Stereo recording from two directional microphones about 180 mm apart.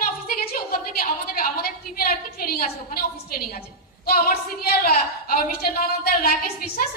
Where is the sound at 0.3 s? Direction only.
55° left (ahead or behind).